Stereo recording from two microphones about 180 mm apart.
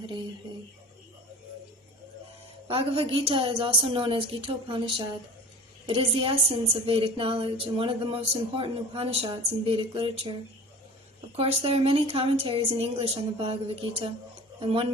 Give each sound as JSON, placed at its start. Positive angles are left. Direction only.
{"t": 2.6, "sound": "a woman's voice", "side_deg": -30}
{"t": 11.3, "sound": "a woman's voice", "side_deg": -30}
{"t": 14.6, "sound": "a woman's voice", "side_deg": -30}